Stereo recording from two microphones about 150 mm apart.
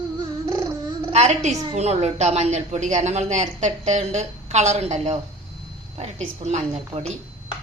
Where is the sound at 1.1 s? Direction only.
50° right (ahead or behind).